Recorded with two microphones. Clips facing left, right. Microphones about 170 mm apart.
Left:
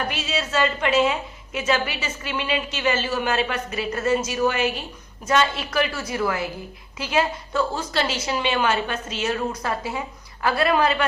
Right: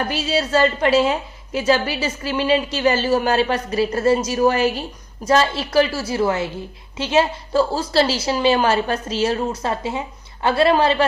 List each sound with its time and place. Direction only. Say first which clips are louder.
0.1 s a woman's voice: right 6 dB; 35° right (ahead or behind)